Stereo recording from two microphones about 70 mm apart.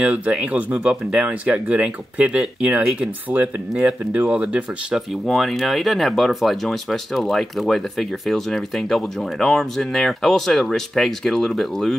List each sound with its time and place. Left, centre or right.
0.0 s speech: centre
5.2 s speech: centre